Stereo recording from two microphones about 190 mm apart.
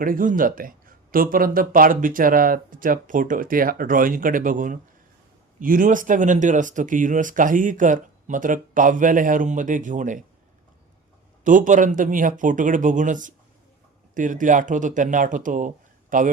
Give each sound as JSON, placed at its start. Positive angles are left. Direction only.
{"t": 0.0, "sound": "speech", "side_deg": -45}
{"t": 11.4, "sound": "speech", "side_deg": -45}